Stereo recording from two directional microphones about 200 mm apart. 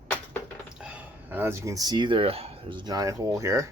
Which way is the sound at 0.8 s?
5° right (ahead or behind).